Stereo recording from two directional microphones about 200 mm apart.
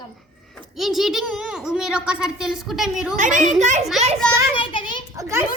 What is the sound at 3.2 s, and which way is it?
Speech, 40° right (ahead or behind).